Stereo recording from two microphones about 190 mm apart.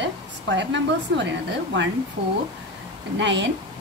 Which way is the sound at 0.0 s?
70° right (ahead or behind).